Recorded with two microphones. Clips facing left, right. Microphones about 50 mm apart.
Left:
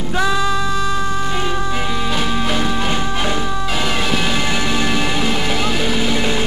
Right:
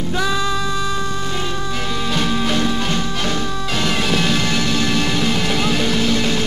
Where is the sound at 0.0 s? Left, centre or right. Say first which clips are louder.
Left 2 dB; centre.